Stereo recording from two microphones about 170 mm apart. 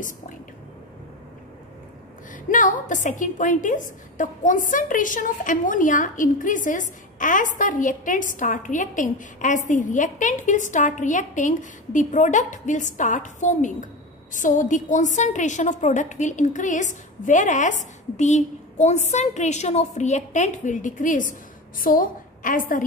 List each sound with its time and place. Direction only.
2.3 s a woman's voice: 50° left (ahead or behind)